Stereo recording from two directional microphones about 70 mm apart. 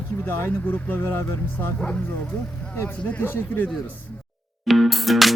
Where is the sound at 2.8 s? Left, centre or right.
Left.